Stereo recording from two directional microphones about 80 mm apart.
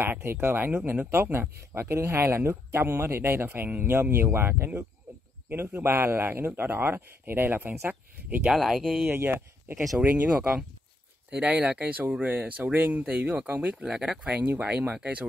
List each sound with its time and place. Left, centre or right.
0.0 s speech: right
8.5 s speech: centre
9.1 s speech: right
10.3 s speech: centre
11.2 s speech: centre
13.8 s speech: centre
14.2 s speech: right